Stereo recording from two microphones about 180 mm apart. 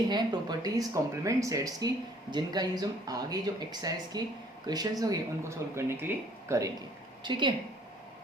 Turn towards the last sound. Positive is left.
turn(degrees=-25)  # may be behind; listen again after turning